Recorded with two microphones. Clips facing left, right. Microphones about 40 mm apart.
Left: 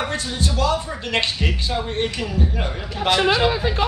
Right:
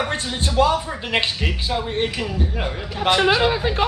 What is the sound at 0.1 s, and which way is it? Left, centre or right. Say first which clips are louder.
Speech: right 1 dB; right.